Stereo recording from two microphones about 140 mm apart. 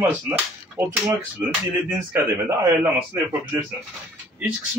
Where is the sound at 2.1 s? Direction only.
20° right (ahead or behind).